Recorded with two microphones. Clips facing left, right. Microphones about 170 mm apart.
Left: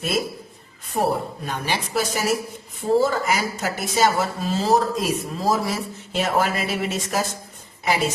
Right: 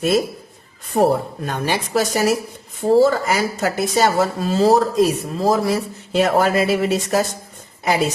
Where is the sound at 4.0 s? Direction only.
40° right (ahead or behind).